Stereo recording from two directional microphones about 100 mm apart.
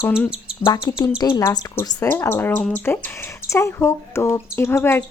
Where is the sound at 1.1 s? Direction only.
35° left (ahead or behind).